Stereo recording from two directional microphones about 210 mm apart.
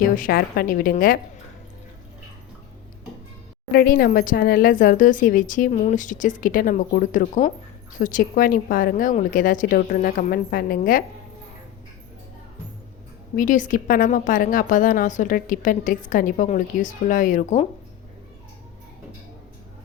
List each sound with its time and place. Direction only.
0.0 s a woman's voice: 45° left (ahead or behind)
3.7 s a woman's voice: 45° left (ahead or behind)
13.3 s a woman's voice: 40° left (ahead or behind)